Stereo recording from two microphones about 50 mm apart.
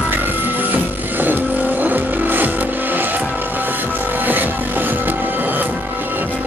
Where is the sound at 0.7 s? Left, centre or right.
Right.